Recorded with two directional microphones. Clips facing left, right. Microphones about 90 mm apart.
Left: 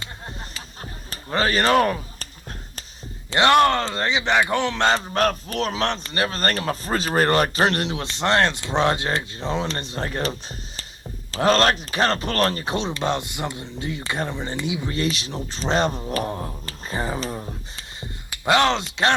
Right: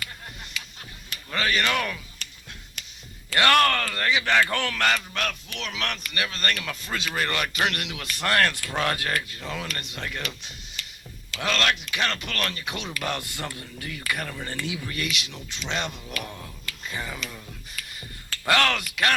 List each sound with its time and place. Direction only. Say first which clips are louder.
0.6 s a sound: left 3 dB; 35° left (ahead or behind)
3.2 s speech: left 4 dB; 25° left (ahead or behind)
18.3 s speech: left 4 dB; 20° left (ahead or behind)